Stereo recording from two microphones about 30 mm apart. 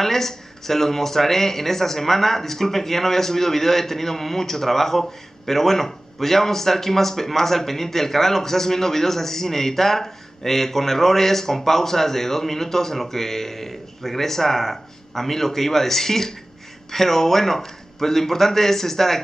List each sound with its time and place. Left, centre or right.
0.0 s speech: centre